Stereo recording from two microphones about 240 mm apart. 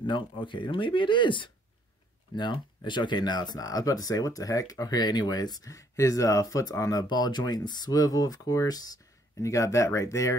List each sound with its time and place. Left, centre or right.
0.0 s speech: centre